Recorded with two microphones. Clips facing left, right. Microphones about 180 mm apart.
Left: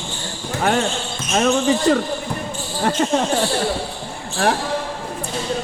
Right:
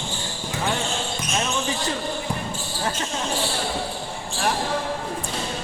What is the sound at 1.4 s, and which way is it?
Basketball bounce, 70° left (ahead or behind).